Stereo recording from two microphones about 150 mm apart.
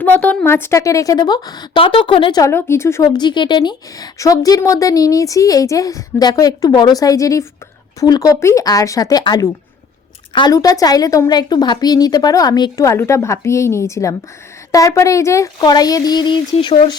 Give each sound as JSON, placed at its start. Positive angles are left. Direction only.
{"t": 0.0, "sound": "a woman's voice", "side_deg": 10}
{"t": 2.4, "sound": "a woman's voice", "side_deg": 15}